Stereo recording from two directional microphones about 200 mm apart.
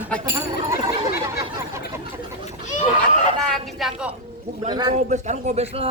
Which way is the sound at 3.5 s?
Centre (ahead or behind).